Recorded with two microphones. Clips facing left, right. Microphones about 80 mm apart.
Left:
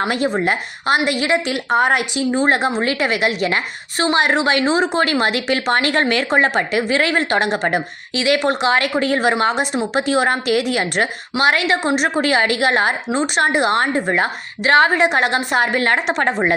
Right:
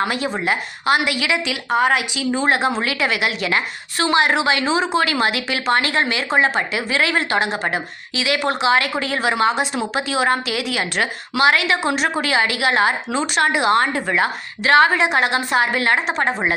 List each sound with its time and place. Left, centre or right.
0.0 s a woman's voice: left
6.9 s a woman's voice: left
15.4 s a woman's voice: left